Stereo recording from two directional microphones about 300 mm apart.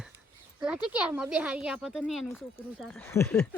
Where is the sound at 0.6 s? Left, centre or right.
Centre.